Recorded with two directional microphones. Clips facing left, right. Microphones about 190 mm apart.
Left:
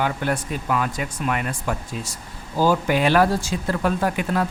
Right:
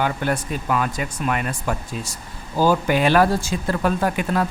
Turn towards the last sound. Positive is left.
turn(degrees=-45)  # may be behind; listen again after turning